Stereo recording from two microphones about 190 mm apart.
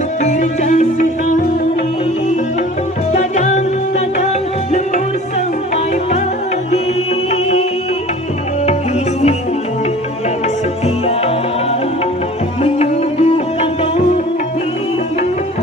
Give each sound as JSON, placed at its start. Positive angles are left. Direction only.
{"t": 0.2, "sound": "music", "side_deg": 40}
{"t": 3.1, "sound": "music", "side_deg": 40}
{"t": 12.7, "sound": "music", "side_deg": 35}